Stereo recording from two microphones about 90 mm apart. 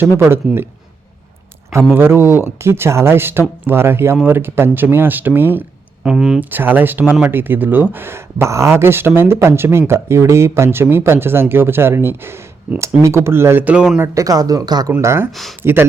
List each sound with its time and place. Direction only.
0.2 s speech: 25° right (ahead or behind)
2.0 s speech: 25° right (ahead or behind)
6.0 s speech: 5° right (ahead or behind)
6.5 s speech: 20° right (ahead or behind)
13.7 s speech: 10° right (ahead or behind)
14.0 s speech: 35° right (ahead or behind)
15.0 s speech: 30° right (ahead or behind)